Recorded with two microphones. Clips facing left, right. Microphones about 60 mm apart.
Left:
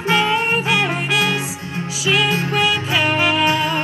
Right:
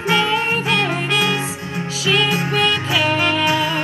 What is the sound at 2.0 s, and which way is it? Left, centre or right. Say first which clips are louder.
Music: even; centre.